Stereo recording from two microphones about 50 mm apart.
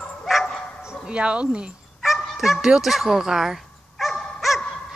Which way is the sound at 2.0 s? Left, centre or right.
Centre.